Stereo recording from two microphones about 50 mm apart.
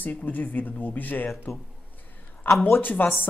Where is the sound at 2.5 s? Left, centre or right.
Left.